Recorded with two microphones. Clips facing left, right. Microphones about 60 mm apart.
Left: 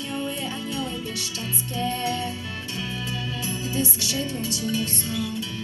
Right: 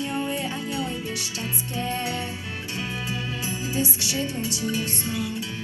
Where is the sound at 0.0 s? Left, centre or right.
Right.